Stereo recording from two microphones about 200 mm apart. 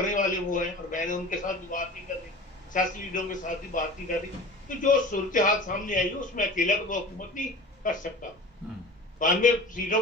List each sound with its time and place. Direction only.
0.1 s a man's voice: 40° left (ahead or behind)
9.2 s a man's voice: 40° left (ahead or behind)